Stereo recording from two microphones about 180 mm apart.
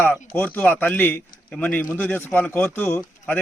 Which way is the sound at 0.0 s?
10° left (ahead or behind).